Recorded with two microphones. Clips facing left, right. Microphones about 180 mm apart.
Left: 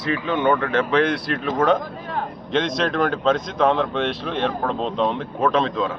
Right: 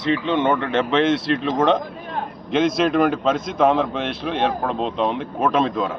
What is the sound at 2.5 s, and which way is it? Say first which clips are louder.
A man's voice: right 4 dB; 5° right (ahead or behind).